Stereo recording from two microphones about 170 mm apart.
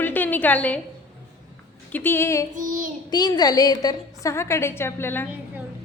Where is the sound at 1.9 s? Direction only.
10° left (ahead or behind).